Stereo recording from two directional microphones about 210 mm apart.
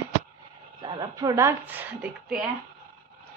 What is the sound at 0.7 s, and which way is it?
A woman's voice, 20° right (ahead or behind).